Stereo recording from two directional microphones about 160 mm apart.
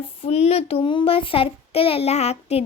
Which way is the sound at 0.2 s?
40° left (ahead or behind).